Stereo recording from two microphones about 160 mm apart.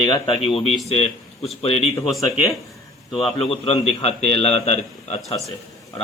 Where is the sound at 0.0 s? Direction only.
30° left (ahead or behind).